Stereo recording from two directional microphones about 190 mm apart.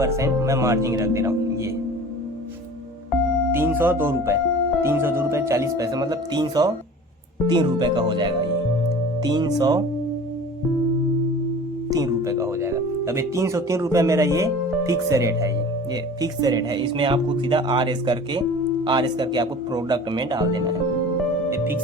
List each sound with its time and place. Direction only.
0.0 s speech: 15° right (ahead or behind)
3.5 s speech: 10° right (ahead or behind)
11.9 s speech: 20° right (ahead or behind)